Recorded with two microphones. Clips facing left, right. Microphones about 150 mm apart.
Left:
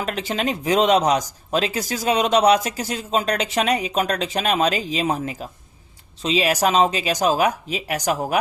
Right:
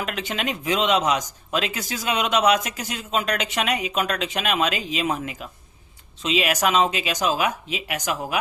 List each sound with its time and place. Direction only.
0.0 s speech: 35° left (ahead or behind)